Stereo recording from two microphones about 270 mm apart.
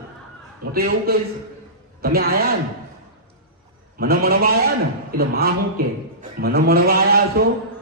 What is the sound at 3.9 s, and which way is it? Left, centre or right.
A man's voice, right.